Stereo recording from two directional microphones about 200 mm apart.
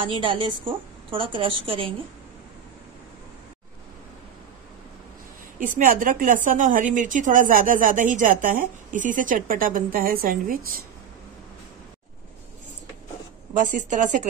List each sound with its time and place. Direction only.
0.0 s a woman's voice: 25° right (ahead or behind)
5.8 s a woman's voice: 45° right (ahead or behind)
13.6 s a woman's voice: 40° right (ahead or behind)